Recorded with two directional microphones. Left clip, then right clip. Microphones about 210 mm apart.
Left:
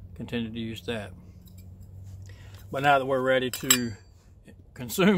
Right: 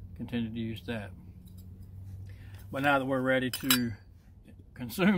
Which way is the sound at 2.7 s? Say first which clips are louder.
Left 5 dB; 45° left (ahead or behind).